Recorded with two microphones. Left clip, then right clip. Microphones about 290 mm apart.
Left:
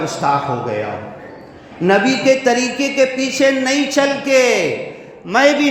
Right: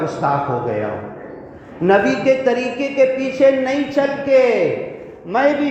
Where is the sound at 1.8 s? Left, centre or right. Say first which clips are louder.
Left 1 dB; left.